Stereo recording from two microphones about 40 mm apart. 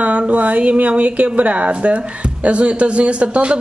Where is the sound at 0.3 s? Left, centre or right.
Right.